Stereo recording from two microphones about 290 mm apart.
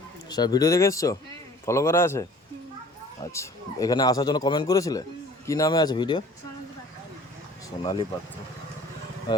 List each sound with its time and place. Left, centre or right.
0.3 s a man's voice: centre
3.3 s a man's voice: centre
7.8 s a man's voice: centre